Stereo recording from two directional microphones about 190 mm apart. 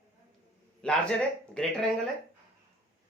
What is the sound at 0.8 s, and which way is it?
Speech, 5° left (ahead or behind).